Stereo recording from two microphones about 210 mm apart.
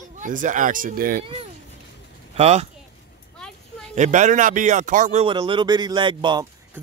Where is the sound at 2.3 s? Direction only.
30° right (ahead or behind).